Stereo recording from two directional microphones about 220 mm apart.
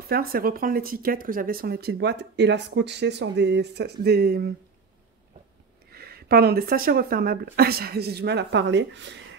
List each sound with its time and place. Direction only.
0.1 s speech: 40° right (ahead or behind)
5.9 s speech: 45° right (ahead or behind)